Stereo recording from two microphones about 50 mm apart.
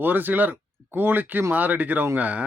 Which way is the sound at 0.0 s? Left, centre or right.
Right.